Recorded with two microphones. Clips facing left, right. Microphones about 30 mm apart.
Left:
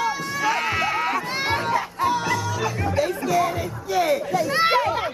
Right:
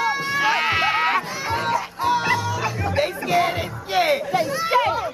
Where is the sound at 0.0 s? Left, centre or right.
Right.